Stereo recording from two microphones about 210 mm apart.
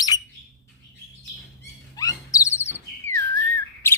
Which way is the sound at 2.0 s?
15° left (ahead or behind).